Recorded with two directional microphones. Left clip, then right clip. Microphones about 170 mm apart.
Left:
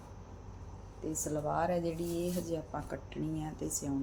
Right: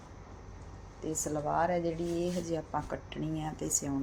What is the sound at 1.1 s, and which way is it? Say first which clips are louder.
Speech: right 3 dB; 10° right (ahead or behind).